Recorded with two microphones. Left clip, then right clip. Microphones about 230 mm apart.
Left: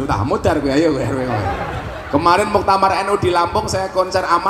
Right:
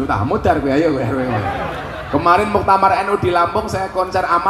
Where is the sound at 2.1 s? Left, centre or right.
Left.